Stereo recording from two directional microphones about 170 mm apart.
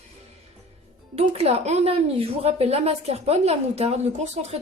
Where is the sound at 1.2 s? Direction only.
35° right (ahead or behind).